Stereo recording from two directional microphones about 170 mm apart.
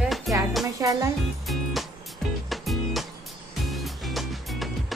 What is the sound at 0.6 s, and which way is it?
Music, 20° right (ahead or behind).